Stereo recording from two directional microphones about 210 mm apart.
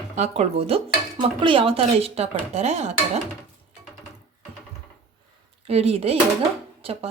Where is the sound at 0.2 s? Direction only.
30° right (ahead or behind).